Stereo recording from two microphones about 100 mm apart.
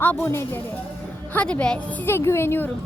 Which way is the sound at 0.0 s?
15° left (ahead or behind).